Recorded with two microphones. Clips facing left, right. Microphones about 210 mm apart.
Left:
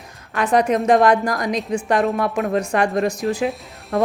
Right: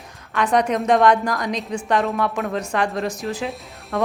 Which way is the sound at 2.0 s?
40° left (ahead or behind).